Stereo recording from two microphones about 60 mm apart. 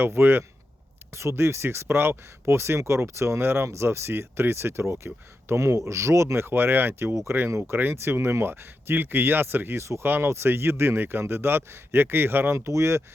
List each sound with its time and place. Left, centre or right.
0.0 s speech: right
12.5 s speech: right